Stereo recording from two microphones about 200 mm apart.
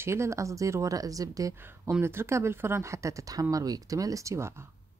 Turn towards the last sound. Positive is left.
turn(degrees=-15)  # may be behind; listen again after turning